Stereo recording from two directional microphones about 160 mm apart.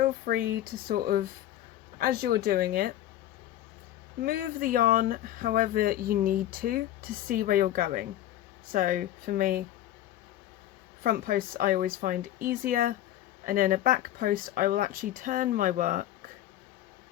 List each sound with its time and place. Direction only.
0.0 s speech: 65° right (ahead or behind)
4.2 s speech: 65° right (ahead or behind)
11.0 s speech: 65° right (ahead or behind)